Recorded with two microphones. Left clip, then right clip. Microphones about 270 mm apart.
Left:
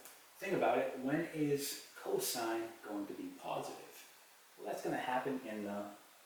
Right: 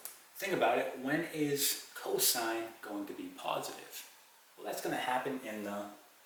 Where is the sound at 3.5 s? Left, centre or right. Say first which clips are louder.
Right 5 dB; centre.